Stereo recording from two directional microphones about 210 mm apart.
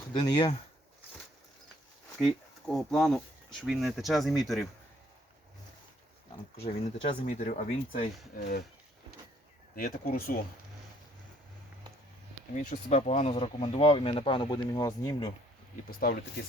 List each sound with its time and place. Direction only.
0.1 s speech: 20° left (ahead or behind)
2.1 s speech: centre (ahead or behind)
6.6 s speech: 30° left (ahead or behind); by 8.6 s 45° left (ahead or behind)
9.7 s speech: 45° left (ahead or behind)
12.5 s speech: 35° left (ahead or behind); by 15.3 s 15° left (ahead or behind)
15.9 s speech: 45° left (ahead or behind)